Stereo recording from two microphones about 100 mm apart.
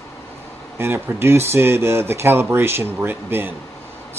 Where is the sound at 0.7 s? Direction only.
25° right (ahead or behind).